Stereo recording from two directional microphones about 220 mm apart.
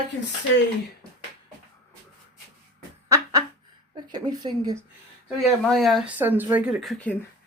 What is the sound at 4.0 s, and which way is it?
Speech, 20° right (ahead or behind).